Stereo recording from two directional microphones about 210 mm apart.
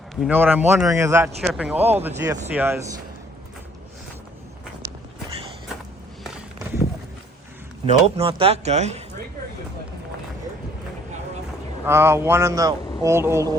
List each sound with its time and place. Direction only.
0.2 s a man's voice: 5° right (ahead or behind)
7.9 s speech: 30° right (ahead or behind)
11.9 s a man's voice: 10° right (ahead or behind)